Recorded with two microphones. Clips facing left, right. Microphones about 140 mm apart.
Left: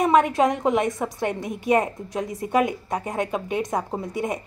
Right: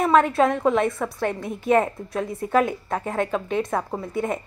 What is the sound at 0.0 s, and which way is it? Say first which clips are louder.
A woman's voice: even; 15° left (ahead or behind).